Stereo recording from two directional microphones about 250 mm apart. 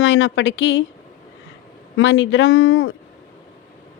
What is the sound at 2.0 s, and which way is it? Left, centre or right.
Speech, left.